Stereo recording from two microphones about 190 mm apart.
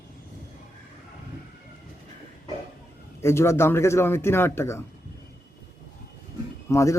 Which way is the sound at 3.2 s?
15° left (ahead or behind).